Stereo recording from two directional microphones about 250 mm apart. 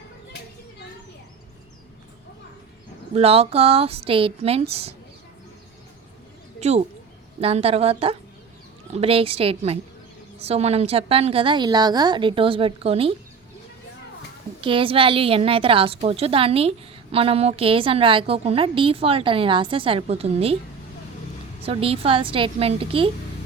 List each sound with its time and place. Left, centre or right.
3.2 s a woman's voice: right
6.6 s a woman's voice: right
14.6 s a woman's voice: right
21.7 s a woman's voice: right